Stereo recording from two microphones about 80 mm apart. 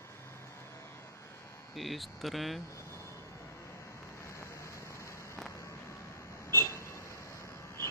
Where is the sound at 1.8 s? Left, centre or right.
Centre.